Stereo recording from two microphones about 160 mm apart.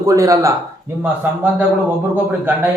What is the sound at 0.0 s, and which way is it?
A man's voice, 20° right (ahead or behind).